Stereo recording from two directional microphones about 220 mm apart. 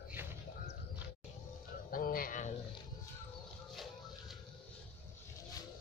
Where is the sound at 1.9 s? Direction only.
40° left (ahead or behind).